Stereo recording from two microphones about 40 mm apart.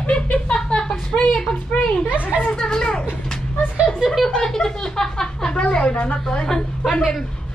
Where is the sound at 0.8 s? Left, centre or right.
Centre.